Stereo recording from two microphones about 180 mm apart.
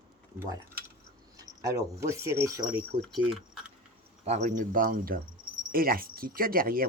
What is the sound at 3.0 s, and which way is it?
Speech, centre (ahead or behind).